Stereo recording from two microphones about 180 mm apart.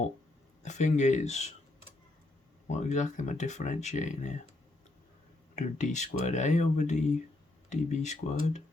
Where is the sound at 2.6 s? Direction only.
40° left (ahead or behind).